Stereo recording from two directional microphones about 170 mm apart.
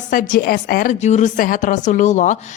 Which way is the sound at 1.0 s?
45° left (ahead or behind).